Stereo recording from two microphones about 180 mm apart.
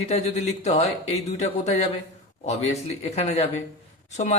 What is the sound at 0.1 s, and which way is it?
Speech, 35° left (ahead or behind).